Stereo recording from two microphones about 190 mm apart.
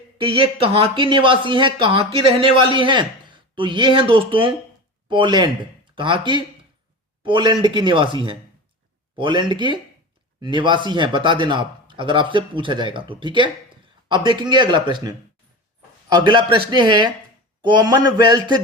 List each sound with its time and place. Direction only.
0.2 s speech: 30° right (ahead or behind)